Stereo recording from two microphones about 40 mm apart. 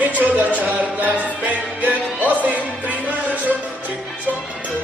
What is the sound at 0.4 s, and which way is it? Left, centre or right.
Music, right.